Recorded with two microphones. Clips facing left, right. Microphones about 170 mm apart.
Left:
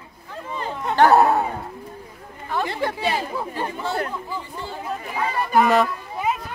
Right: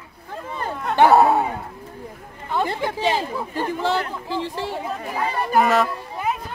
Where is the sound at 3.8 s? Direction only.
85° right.